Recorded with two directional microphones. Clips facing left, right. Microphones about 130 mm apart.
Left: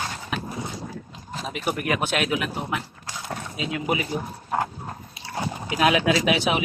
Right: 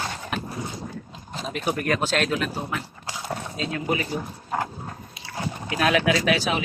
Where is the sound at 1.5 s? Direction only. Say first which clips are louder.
Right 1 dB; 10° left (ahead or behind).